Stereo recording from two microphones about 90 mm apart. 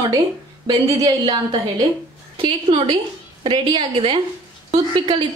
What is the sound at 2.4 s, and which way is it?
Speech, 75° right (ahead or behind).